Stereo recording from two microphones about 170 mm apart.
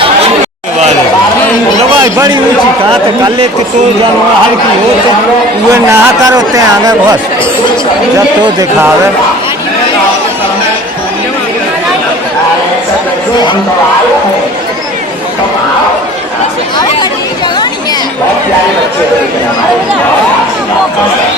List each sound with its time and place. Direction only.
2.1 s a man's voice: 20° right (ahead or behind)
5.9 s speech: 20° right (ahead or behind)